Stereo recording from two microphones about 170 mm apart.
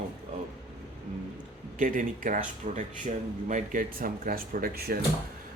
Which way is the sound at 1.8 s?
55° right (ahead or behind).